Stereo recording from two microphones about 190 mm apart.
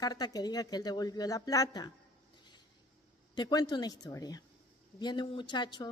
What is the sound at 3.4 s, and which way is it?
A woman's voice, 20° left (ahead or behind).